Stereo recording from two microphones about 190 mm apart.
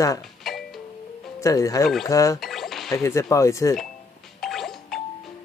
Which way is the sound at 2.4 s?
Centre (ahead or behind).